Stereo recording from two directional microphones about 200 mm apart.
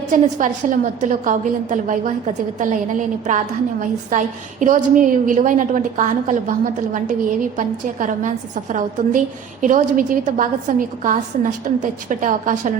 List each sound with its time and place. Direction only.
0.1 s a woman's voice: 40° right (ahead or behind)